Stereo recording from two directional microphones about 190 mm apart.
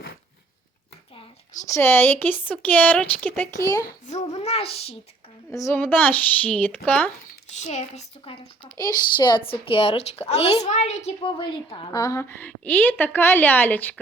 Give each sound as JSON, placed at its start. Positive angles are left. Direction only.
{"t": 1.7, "sound": "a woman's voice", "side_deg": 10}
{"t": 3.8, "sound": "a child's voice", "side_deg": 40}
{"t": 5.5, "sound": "a woman's voice", "side_deg": 15}
{"t": 7.5, "sound": "a woman's voice", "side_deg": 35}